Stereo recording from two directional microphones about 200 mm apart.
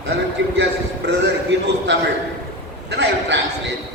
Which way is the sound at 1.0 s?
60° right (ahead or behind).